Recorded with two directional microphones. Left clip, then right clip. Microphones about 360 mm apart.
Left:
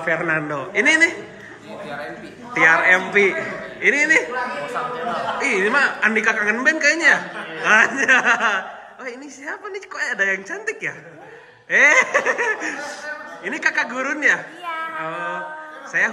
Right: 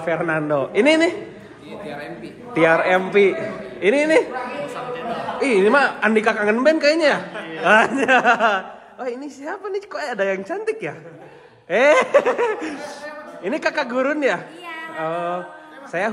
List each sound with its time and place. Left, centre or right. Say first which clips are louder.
0.0 s a woman's voice: left 1 dB; centre
2.5 s a woman's voice: left 2 dB; centre
5.4 s a woman's voice: right 3 dB; centre